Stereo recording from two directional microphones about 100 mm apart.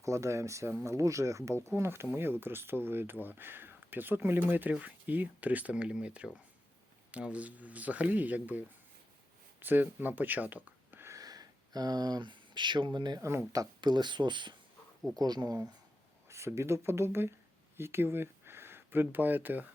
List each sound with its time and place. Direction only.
0.0 s speech: 30° right (ahead or behind)
11.1 s a sound: 40° right (ahead or behind)
13.1 s speech: 30° right (ahead or behind)
13.5 s speech: 40° right (ahead or behind)
16.3 s speech: 30° right (ahead or behind)